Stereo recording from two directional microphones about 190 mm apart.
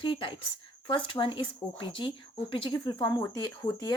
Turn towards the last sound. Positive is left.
turn(degrees=20)  # may be behind; listen again after turning